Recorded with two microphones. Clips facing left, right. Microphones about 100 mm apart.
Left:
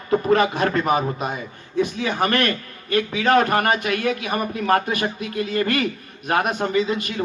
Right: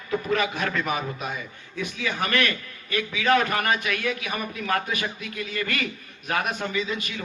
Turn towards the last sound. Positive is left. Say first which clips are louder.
# left 7 dB
turn(degrees=45)  # may be behind; listen again after turning